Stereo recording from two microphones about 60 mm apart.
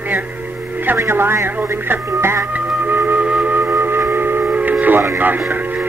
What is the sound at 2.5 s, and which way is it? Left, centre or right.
Music, right.